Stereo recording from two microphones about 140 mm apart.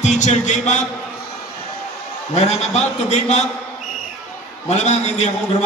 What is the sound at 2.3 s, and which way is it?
A man's voice, 50° left (ahead or behind).